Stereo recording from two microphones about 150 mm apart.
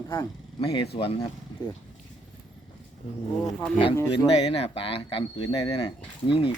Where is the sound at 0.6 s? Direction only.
35° left (ahead or behind).